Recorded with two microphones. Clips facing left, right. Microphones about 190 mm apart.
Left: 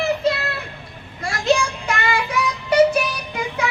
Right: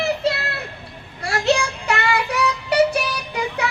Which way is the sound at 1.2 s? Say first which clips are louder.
Even; 70° right (ahead or behind).